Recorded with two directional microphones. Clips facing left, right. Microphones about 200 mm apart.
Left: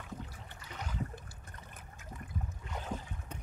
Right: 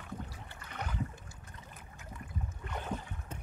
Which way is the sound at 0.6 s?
60° right (ahead or behind).